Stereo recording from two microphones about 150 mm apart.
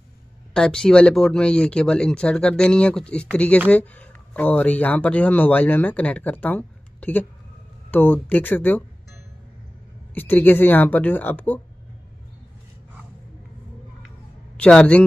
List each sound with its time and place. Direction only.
0.5 s speech: 5° left (ahead or behind)
10.1 s speech: 10° left (ahead or behind)
14.6 s speech: 10° left (ahead or behind)